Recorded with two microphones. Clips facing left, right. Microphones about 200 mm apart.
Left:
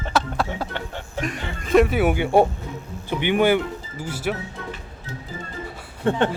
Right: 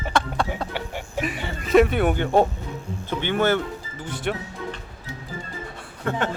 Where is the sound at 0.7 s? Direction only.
10° right (ahead or behind); by 2.5 s 10° left (ahead or behind).